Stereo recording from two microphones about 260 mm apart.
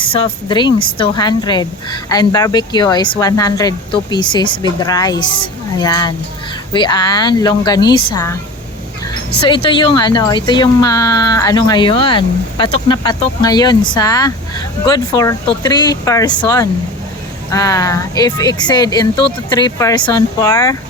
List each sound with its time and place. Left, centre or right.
0.1 s speech: centre
9.4 s speech: centre